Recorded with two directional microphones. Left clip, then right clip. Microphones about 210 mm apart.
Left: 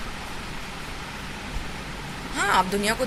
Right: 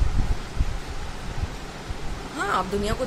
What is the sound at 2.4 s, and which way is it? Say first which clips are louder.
Speech: left 3 dB; 15° right (ahead or behind).